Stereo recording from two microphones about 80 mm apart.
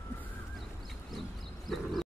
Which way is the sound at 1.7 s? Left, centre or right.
Centre.